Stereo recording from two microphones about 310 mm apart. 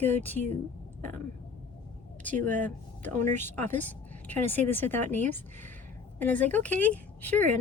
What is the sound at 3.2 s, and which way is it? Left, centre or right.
Speech, right.